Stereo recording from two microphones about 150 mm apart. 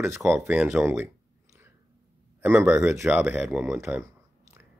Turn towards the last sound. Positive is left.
turn(degrees=-5)  # may be behind; listen again after turning